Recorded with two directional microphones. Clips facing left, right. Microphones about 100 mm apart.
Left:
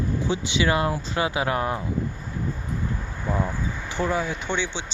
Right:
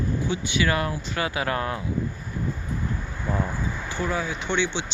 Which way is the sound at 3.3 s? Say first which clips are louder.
Left 1 dB; 10° left (ahead or behind).